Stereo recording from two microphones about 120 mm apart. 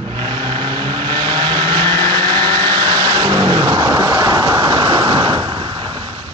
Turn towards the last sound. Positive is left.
turn(degrees=-40)  # may be behind; listen again after turning